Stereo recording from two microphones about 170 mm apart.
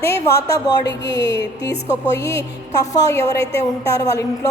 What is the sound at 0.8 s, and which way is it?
Speech, 90° left.